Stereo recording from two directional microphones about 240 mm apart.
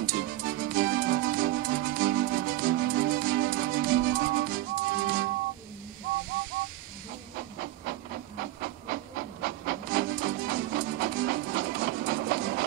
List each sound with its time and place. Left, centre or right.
0.0 s music: right
8.4 s hiss: right
9.4 s music: right